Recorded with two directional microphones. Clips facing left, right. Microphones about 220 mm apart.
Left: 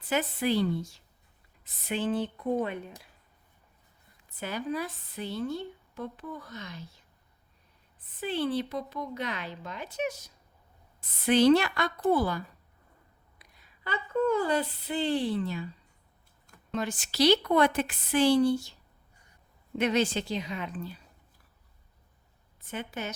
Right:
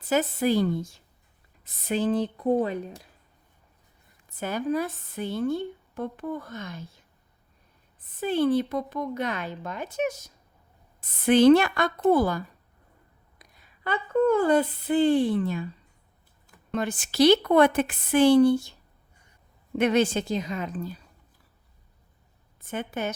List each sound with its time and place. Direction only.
0.1 s a woman's voice: 40° right (ahead or behind)
1.6 s speech: 40° right (ahead or behind)
4.4 s a woman's voice: 45° right (ahead or behind)
8.2 s a woman's voice: 45° right (ahead or behind)
13.4 s speech: 55° right (ahead or behind)
16.7 s a woman's voice: 55° right (ahead or behind)
22.6 s a woman's voice: 50° right (ahead or behind)